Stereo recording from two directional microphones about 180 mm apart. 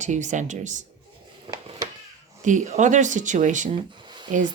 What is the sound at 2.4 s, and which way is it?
Speech, 45° right (ahead or behind).